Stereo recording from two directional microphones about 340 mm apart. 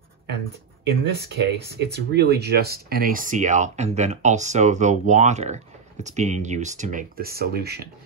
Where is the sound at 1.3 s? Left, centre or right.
Right.